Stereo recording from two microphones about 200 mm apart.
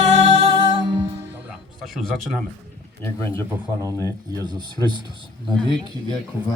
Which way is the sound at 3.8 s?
15° right (ahead or behind).